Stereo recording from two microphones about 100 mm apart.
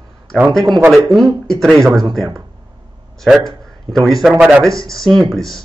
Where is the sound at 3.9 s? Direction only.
35° right (ahead or behind).